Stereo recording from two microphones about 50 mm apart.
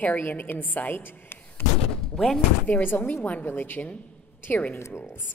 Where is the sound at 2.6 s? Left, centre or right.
Left.